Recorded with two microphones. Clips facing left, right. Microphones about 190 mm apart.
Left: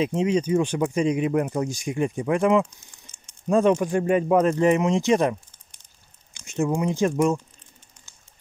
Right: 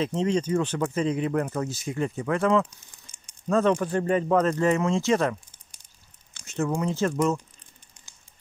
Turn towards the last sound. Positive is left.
turn(degrees=10)  # may be behind; listen again after turning